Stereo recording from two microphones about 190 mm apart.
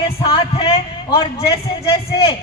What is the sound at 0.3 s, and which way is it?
A man's voice, 30° left (ahead or behind).